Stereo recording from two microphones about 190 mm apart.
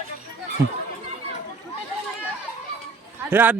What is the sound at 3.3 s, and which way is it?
Speech, 10° right (ahead or behind).